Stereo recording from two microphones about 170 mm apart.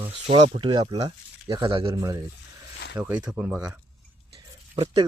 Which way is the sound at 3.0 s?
5° right (ahead or behind).